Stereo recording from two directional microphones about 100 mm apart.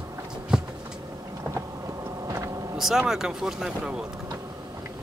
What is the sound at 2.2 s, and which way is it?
Boat, 30° right (ahead or behind).